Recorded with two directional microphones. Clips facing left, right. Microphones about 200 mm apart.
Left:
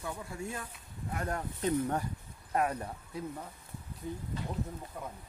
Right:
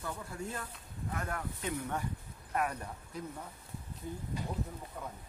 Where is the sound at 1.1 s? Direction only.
35° left (ahead or behind).